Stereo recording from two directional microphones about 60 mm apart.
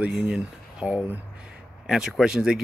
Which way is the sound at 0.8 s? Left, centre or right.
Centre.